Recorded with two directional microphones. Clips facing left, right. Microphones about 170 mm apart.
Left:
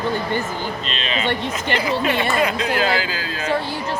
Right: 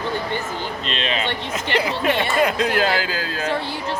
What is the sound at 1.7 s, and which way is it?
Speech, 50° left (ahead or behind).